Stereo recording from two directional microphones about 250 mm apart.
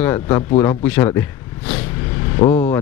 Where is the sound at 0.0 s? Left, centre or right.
Centre.